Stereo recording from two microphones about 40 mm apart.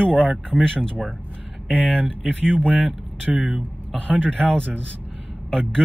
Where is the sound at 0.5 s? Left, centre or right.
Right.